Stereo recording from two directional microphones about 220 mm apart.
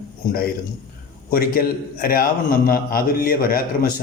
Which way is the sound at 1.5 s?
40° left (ahead or behind).